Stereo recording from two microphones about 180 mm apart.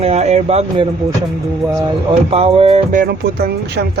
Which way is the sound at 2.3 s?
35° right (ahead or behind).